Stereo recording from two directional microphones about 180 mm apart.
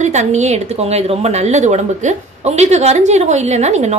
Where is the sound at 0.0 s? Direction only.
40° right (ahead or behind).